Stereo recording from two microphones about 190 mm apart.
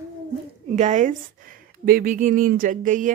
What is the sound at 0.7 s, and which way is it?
A woman's voice, 40° right (ahead or behind).